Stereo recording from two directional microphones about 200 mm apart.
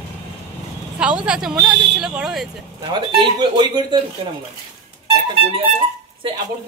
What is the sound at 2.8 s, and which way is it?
Speech, 25° right (ahead or behind).